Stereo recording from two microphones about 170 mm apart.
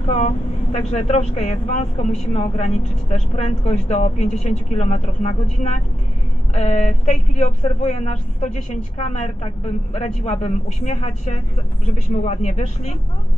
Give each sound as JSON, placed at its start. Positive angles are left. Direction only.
{"t": 0.1, "sound": "speech", "side_deg": 40}